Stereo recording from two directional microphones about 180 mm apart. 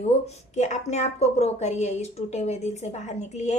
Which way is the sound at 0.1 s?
35° left (ahead or behind).